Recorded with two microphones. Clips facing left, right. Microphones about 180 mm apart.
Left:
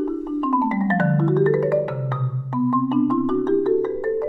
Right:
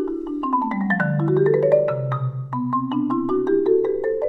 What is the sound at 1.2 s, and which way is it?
Music, 5° right (ahead or behind).